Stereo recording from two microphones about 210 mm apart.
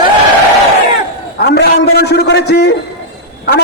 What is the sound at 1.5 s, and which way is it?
A man's voice, 55° left (ahead or behind).